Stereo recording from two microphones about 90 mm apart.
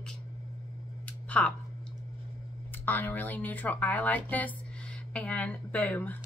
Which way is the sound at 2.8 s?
20° left (ahead or behind).